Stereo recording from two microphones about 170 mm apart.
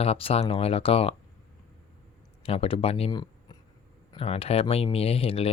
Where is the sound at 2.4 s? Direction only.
35° left (ahead or behind).